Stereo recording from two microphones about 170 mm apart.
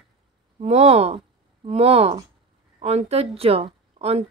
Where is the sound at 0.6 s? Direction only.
40° right (ahead or behind).